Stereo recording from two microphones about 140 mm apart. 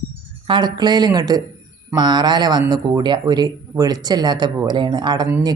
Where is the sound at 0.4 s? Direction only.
35° right (ahead or behind).